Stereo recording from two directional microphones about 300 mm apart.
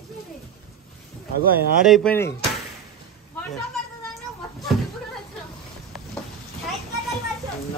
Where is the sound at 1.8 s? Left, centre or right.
Centre.